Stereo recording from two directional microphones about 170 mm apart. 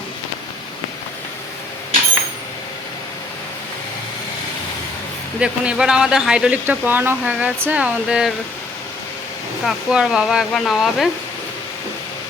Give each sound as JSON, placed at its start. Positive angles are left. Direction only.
{"t": 5.4, "sound": "speech", "side_deg": -5}
{"t": 9.6, "sound": "speech", "side_deg": -5}